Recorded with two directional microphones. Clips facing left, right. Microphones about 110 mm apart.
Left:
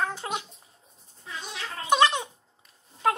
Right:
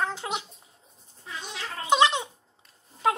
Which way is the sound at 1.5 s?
15° right (ahead or behind).